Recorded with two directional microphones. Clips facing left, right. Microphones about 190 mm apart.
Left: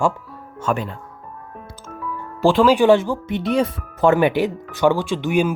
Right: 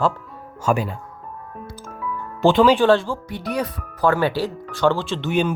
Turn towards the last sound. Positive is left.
turn(degrees=10)  # may be behind; listen again after turning